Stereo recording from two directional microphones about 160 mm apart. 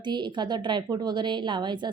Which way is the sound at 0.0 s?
30° right (ahead or behind).